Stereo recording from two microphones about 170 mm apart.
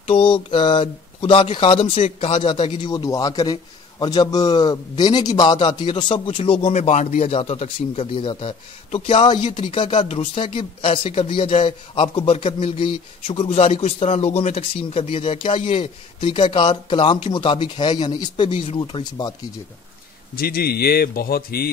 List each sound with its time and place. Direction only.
0.0 s a man's voice: 30° left (ahead or behind)
20.3 s a man's voice: 60° left (ahead or behind)